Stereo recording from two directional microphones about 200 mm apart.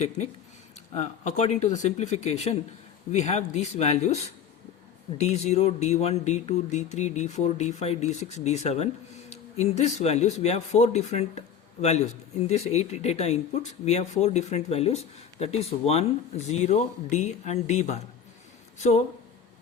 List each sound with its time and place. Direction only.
0.9 s speech: 35° left (ahead or behind)
5.2 s speech: 35° left (ahead or behind)